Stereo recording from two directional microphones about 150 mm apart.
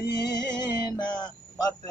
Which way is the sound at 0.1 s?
25° left (ahead or behind).